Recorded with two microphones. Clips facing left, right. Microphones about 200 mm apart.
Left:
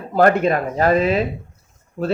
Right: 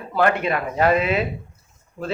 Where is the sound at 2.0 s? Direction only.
45° left (ahead or behind).